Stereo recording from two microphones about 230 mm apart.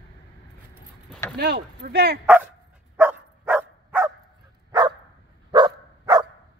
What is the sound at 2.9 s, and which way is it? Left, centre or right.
Dog, centre.